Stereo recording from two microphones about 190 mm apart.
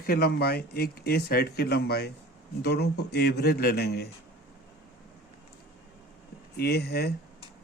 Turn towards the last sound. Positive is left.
turn(degrees=55)  # may be behind; listen again after turning